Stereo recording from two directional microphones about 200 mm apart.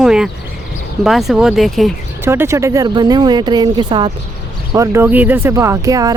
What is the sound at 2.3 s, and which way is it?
Speech, 15° right (ahead or behind).